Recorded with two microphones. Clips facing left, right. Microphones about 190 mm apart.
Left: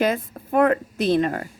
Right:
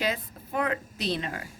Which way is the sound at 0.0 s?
50° left (ahead or behind).